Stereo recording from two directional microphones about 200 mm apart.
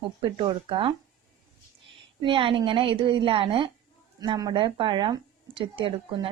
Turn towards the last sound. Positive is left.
turn(degrees=-25)  # may be behind; listen again after turning